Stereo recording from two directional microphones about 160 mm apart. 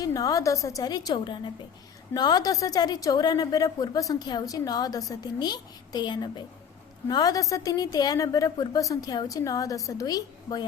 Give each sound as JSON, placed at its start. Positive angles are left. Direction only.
{"t": 0.0, "sound": "a woman's voice", "side_deg": 25}